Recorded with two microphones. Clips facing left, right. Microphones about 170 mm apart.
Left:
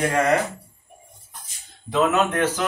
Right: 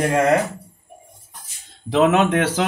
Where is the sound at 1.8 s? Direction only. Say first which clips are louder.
Right 4 dB; 85° right.